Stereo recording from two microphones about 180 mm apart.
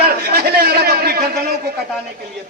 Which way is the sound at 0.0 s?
65° right (ahead or behind).